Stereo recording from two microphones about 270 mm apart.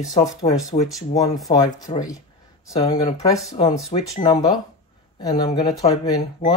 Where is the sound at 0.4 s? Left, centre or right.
Centre.